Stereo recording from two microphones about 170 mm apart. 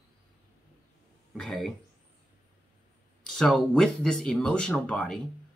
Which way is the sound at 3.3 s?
5° left (ahead or behind).